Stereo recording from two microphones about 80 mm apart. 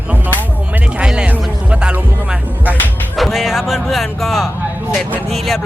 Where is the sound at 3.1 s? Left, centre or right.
Centre.